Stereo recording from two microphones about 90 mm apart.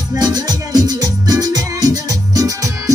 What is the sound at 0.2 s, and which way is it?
Music, 45° right (ahead or behind).